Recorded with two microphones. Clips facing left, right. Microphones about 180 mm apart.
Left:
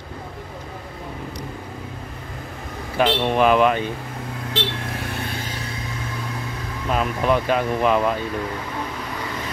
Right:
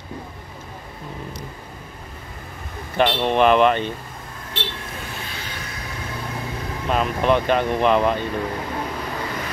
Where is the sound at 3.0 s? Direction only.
5° left (ahead or behind).